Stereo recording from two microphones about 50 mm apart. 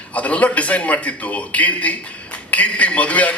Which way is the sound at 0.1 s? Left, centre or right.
Left.